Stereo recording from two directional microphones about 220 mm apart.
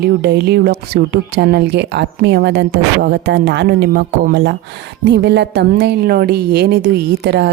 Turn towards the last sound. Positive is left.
turn(degrees=-50)  # may be behind; listen again after turning